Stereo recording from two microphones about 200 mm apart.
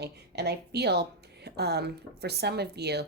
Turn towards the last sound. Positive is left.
turn(degrees=-55)  # may be behind; listen again after turning